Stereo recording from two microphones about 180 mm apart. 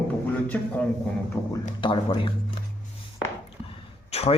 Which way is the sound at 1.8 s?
25° left (ahead or behind).